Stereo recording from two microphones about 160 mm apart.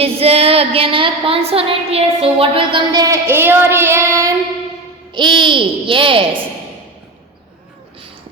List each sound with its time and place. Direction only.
0.0 s female singing: 40° right (ahead or behind); by 4.4 s 20° right (ahead or behind)
5.1 s female singing: 30° right (ahead or behind)